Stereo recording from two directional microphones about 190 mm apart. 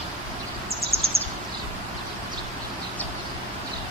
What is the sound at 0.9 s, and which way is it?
Bird, 30° right (ahead or behind).